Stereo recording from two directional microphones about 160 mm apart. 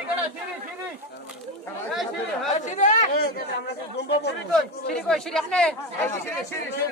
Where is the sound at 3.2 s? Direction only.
90° left.